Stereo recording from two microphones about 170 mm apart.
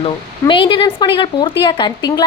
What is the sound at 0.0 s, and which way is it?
A woman's voice, 30° left (ahead or behind).